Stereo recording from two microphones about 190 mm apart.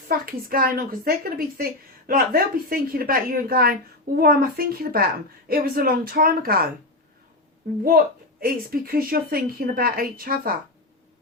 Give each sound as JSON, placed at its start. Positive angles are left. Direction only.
{"t": 0.1, "sound": "a woman's voice", "side_deg": -50}
{"t": 7.9, "sound": "a woman's voice", "side_deg": -50}